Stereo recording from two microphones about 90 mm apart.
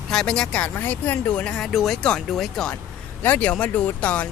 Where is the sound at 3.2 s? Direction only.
20° left (ahead or behind).